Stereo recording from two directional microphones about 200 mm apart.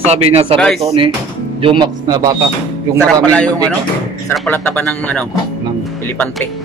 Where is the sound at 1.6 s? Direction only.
25° right (ahead or behind).